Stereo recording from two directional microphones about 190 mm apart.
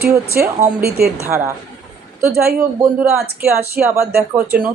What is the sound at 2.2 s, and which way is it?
A woman's voice, 15° right (ahead or behind).